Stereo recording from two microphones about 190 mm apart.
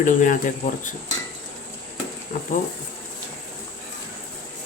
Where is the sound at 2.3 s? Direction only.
45° left (ahead or behind).